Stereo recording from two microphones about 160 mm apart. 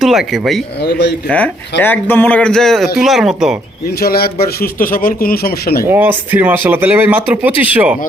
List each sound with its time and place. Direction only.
0.0 s speech: centre (ahead or behind)
0.8 s a man's voice: 90° left
1.8 s a sound: 10° left (ahead or behind)
3.0 s speech: centre (ahead or behind)
4.0 s a man's voice: 75° left (ahead or behind)
5.8 s speech: 10° right (ahead or behind)